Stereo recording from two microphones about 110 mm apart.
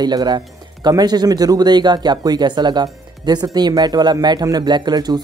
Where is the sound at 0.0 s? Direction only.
40° right (ahead or behind).